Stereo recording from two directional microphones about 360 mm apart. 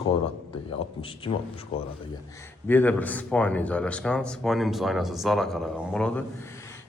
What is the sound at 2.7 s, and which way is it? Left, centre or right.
A man's voice, centre.